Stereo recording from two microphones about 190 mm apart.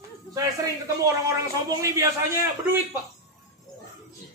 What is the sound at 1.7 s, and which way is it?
Speech, 15° right (ahead or behind).